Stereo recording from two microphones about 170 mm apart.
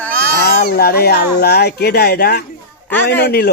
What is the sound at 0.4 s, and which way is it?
Speech, 65° left (ahead or behind).